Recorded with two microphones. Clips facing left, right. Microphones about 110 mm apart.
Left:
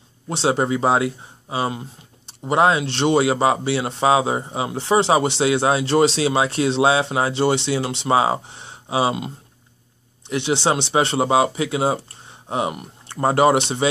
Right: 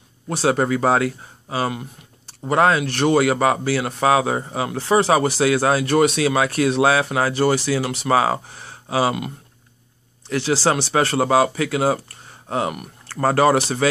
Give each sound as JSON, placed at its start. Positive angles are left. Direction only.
{"t": 0.3, "sound": "speech", "side_deg": 25}